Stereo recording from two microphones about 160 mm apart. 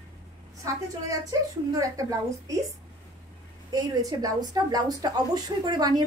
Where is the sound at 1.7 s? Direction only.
20° right (ahead or behind).